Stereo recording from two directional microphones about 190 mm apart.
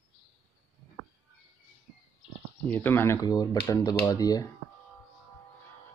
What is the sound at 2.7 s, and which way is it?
Speech, 10° left (ahead or behind).